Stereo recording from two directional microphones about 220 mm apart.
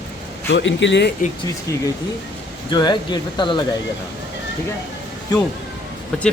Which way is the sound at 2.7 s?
20° left (ahead or behind).